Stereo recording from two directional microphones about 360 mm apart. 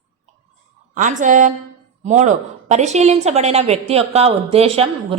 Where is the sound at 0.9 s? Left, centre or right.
Right.